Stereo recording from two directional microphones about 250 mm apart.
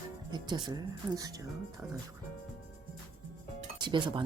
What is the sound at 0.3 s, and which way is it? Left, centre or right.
Speech, centre.